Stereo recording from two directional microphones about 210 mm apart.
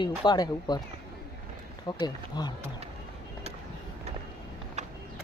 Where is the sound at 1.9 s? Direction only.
20° left (ahead or behind).